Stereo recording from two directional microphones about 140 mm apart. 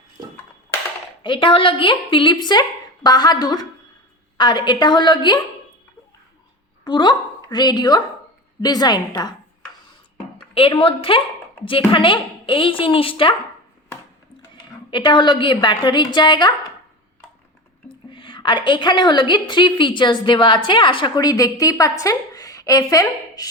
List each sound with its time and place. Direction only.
1.2 s a woman's voice: 35° left (ahead or behind)
6.8 s a woman's voice: 30° left (ahead or behind)
10.3 s a woman's voice: 40° left (ahead or behind)
14.5 s a woman's voice: 35° left (ahead or behind)
17.8 s a woman's voice: 35° left (ahead or behind)